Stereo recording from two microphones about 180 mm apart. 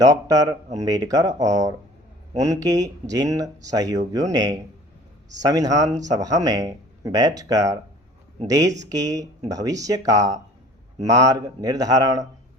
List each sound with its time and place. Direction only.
0.0 s speech: 20° right (ahead or behind)